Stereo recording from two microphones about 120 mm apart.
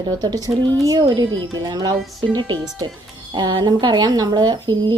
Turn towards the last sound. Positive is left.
turn(degrees=-35)  # may be behind; listen again after turning